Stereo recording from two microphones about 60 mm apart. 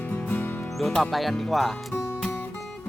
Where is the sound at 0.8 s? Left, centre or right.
Centre.